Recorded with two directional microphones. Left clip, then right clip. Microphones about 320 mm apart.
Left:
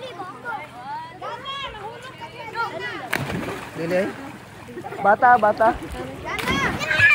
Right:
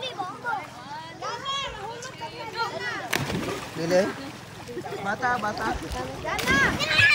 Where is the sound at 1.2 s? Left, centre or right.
Left.